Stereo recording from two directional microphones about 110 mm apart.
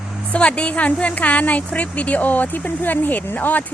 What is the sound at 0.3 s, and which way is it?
A woman's voice, 10° left (ahead or behind).